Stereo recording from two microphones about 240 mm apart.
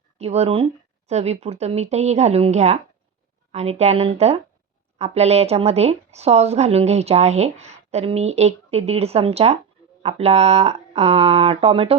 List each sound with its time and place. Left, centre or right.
0.2 s speech: right